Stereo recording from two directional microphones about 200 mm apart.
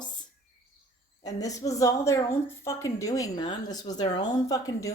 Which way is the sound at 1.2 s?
15° left (ahead or behind).